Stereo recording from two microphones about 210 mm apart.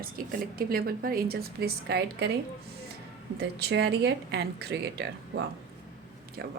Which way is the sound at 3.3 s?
50° right (ahead or behind).